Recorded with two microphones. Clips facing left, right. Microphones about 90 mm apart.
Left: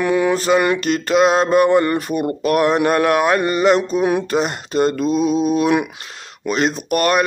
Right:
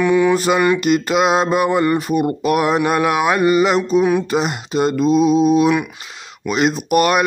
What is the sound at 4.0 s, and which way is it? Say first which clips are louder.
Mantra: right 2 dB; 15° left (ahead or behind).